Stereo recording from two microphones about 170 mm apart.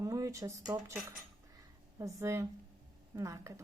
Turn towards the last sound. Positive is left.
turn(degrees=-20)  # may be behind; listen again after turning